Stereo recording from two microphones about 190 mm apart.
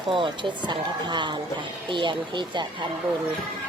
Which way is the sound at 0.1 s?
25° right (ahead or behind).